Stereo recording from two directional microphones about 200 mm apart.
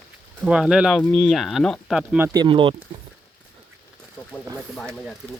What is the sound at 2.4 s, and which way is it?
Speech, 25° right (ahead or behind).